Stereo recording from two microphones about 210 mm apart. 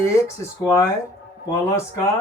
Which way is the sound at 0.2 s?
15° left (ahead or behind).